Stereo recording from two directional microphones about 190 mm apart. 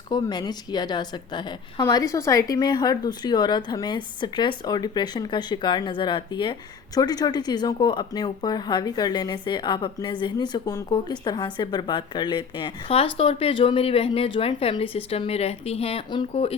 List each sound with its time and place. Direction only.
0.1 s a woman's voice: 20° left (ahead or behind)